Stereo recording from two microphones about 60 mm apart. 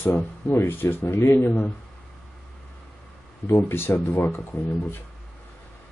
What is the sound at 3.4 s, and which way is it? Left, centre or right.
Speech, left.